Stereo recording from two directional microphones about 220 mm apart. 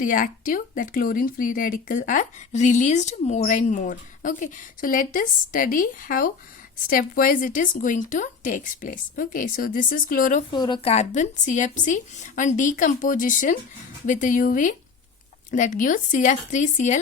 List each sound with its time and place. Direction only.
0.0 s speech: 35° left (ahead or behind)
10.5 s speech: 20° left (ahead or behind)